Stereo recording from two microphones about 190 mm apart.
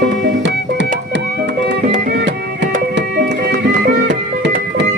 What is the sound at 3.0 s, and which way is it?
Music, 65° right (ahead or behind).